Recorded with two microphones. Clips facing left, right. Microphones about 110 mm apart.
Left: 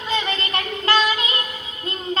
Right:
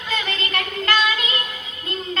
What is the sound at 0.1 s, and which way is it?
Child singing, 30° left (ahead or behind).